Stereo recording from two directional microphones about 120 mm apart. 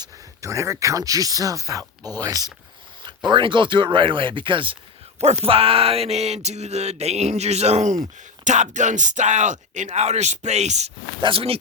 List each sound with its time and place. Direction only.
0.0 s speech: 25° right (ahead or behind)
3.2 s speech: 40° right (ahead or behind)
5.2 s speech: 60° right (ahead or behind)
8.4 s speech: 85° right; by 10.9 s 70° right (ahead or behind)
11.2 s speech: 50° right (ahead or behind)